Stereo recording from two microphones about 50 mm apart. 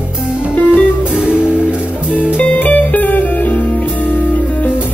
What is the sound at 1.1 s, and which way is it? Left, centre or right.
Music, centre.